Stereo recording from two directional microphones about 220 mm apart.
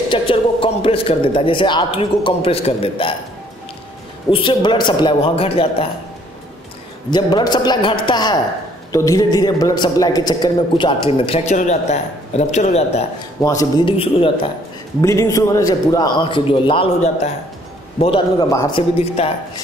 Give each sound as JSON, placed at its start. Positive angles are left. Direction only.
{"t": 0.1, "sound": "a man's voice", "side_deg": 25}
{"t": 4.3, "sound": "a man's voice", "side_deg": 20}
{"t": 7.1, "sound": "a man's voice", "side_deg": 20}
{"t": 13.4, "sound": "a man's voice", "side_deg": 15}
{"t": 15.0, "sound": "a man's voice", "side_deg": 15}
{"t": 18.8, "sound": "a man's voice", "side_deg": 25}